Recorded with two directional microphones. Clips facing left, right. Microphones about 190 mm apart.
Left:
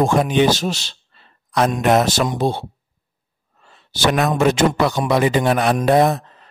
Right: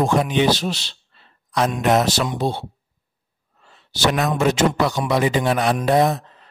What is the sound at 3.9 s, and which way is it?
Speech, 55° left (ahead or behind).